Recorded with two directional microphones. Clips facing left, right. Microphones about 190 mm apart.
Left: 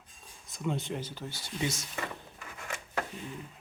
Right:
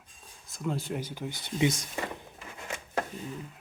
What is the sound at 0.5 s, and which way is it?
Speech, centre (ahead or behind).